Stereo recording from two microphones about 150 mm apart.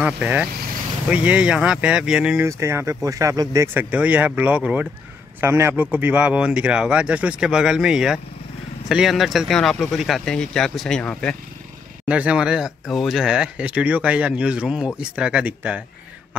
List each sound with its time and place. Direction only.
0.0 s speech: 10° right (ahead or behind)
2.4 s speech: 20° right (ahead or behind); by 11.3 s 5° left (ahead or behind)
12.1 s speech: 10° right (ahead or behind)